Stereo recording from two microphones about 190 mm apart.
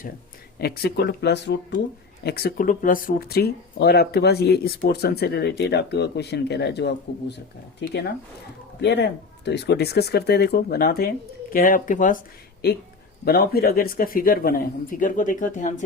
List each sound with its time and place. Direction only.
0.6 s speech: 55° left (ahead or behind)
2.2 s speech: 55° left (ahead or behind)
12.6 s speech: 55° left (ahead or behind)